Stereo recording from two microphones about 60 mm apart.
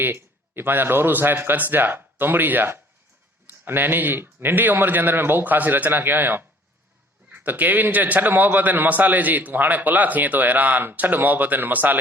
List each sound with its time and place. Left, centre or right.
0.0 s a man's voice: right